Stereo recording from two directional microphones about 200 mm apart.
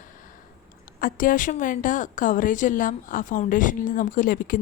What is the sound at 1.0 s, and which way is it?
A woman's voice, 45° left (ahead or behind).